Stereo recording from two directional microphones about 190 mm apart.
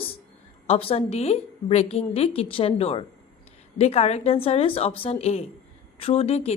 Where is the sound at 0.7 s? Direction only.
30° left (ahead or behind).